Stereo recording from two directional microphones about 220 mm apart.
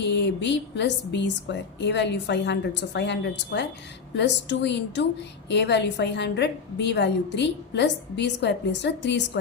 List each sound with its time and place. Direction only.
0.0 s a woman's voice: 50° left (ahead or behind)